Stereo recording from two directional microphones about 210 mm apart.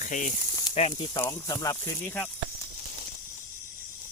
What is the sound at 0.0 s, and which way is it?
Speech, 35° left (ahead or behind).